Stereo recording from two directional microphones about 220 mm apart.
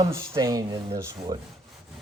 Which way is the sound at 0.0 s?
15° right (ahead or behind).